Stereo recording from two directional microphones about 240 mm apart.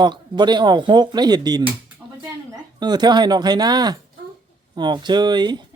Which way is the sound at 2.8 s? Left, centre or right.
Centre.